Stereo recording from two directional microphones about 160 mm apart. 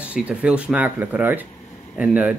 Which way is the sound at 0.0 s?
5° right (ahead or behind).